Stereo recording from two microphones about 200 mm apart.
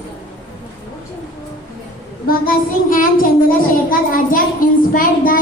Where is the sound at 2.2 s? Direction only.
45° left (ahead or behind).